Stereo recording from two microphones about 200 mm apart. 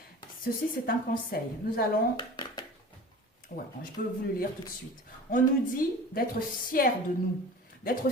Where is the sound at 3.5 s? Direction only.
40° left (ahead or behind).